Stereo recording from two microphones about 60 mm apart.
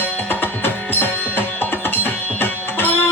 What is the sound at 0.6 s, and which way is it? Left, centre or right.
Music, left.